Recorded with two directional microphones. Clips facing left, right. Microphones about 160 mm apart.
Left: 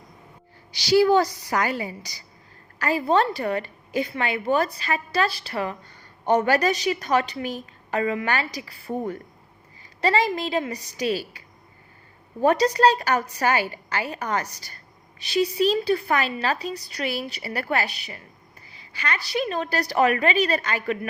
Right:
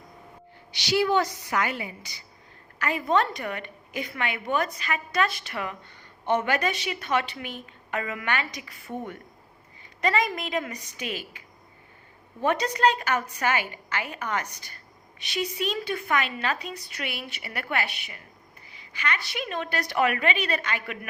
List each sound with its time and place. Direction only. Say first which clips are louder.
0.7 s a woman's voice: left 6 dB; 35° left (ahead or behind)